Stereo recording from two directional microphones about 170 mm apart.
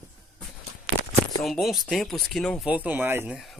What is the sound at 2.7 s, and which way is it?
Speech, 10° right (ahead or behind).